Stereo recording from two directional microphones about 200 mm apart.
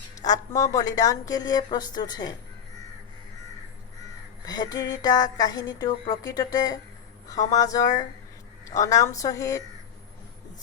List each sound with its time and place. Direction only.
0.2 s a woman's voice: 15° left (ahead or behind)
4.4 s a sound: 20° left (ahead or behind)
7.5 s a woman's voice: 15° left (ahead or behind)